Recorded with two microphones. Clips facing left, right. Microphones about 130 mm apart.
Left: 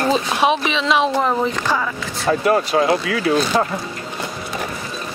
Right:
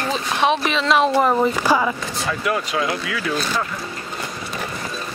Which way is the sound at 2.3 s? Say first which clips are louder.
Left 7 dB; 35° left (ahead or behind).